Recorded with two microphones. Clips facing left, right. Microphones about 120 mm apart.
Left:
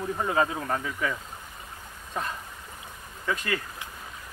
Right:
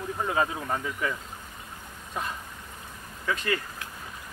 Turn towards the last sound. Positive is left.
turn(degrees=5)  # may be behind; listen again after turning